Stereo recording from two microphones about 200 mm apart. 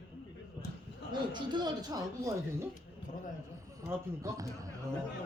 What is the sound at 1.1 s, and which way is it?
Speech, 25° right (ahead or behind).